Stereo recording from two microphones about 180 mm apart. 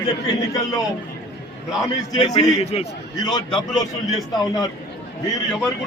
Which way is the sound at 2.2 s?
25° left (ahead or behind).